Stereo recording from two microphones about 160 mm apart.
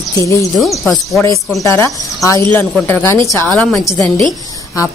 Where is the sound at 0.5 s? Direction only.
Centre (ahead or behind).